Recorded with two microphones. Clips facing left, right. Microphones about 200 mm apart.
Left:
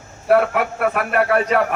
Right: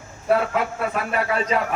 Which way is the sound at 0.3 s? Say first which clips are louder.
Left 4 dB; 65° left (ahead or behind).